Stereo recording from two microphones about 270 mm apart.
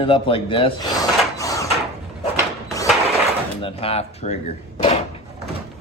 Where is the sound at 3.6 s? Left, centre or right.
Centre.